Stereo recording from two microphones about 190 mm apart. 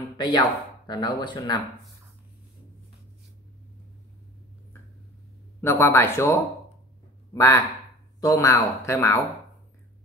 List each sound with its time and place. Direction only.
0.2 s speech: 20° left (ahead or behind)
5.6 s speech: 15° left (ahead or behind)